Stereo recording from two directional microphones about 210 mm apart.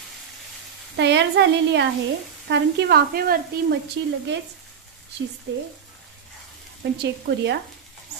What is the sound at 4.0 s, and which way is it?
Speech, 60° right (ahead or behind).